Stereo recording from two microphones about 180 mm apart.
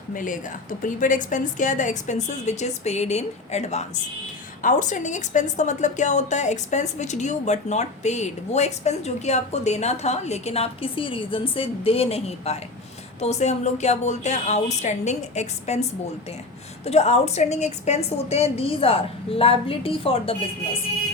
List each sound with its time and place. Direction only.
0.1 s a woman's voice: 50° left (ahead or behind); by 20.3 s 30° left (ahead or behind)